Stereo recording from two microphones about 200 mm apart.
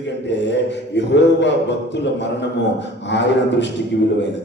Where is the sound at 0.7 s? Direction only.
60° left (ahead or behind).